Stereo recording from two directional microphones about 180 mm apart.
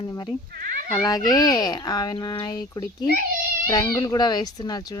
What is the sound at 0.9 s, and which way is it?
A child's voice, 15° left (ahead or behind).